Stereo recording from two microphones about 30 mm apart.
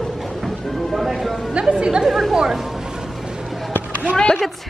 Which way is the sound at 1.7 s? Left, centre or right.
Right.